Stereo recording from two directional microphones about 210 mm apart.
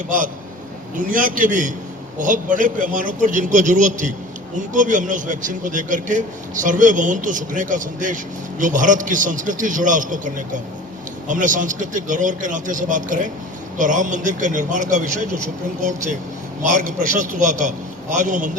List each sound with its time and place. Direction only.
0.9 s a man's voice: 40° right (ahead or behind)